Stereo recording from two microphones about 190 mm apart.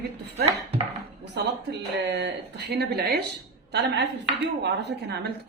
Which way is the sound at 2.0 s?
65° right (ahead or behind).